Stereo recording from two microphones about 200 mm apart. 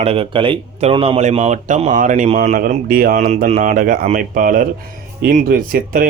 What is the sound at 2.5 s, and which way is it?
Speech, 45° right (ahead or behind).